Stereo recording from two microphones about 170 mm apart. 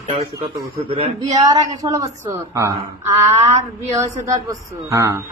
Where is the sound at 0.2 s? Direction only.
35° right (ahead or behind).